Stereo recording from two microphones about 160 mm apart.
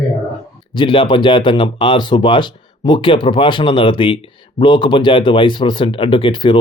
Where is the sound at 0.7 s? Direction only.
30° left (ahead or behind).